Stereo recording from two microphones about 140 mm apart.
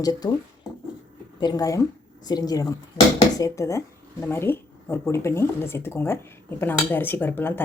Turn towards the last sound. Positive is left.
turn(degrees=15)  # may be behind; listen again after turning